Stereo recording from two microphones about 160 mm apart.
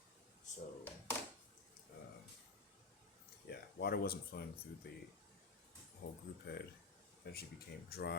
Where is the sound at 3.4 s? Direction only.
75° left (ahead or behind).